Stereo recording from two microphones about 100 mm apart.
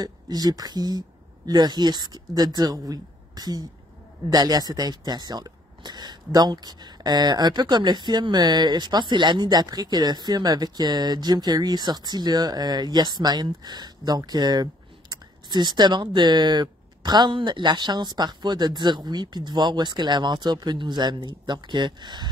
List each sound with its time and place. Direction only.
0.0 s speech: 40° right (ahead or behind)